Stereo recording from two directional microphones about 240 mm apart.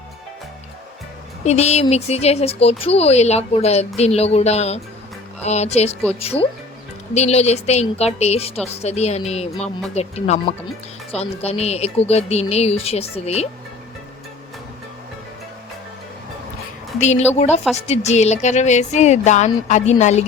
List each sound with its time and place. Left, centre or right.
1.5 s speech: left
17.0 s speech: left